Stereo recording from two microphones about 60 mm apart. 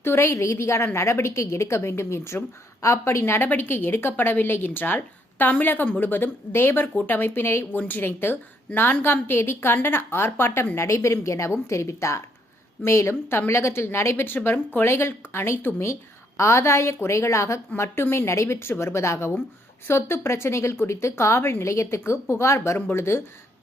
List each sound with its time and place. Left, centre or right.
0.0 s a woman's voice: left
17.7 s a woman's voice: left